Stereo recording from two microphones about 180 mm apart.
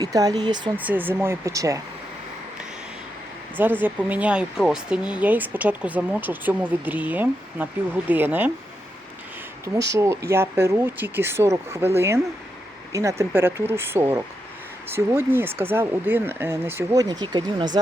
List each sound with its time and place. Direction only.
0.0 s speech: 20° right (ahead or behind)
0.8 s speech: 10° right (ahead or behind)
3.6 s speech: 10° right (ahead or behind)
9.9 s speech: 15° right (ahead or behind)